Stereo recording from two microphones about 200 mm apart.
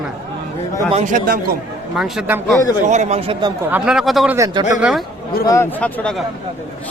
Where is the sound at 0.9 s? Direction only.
45° right (ahead or behind).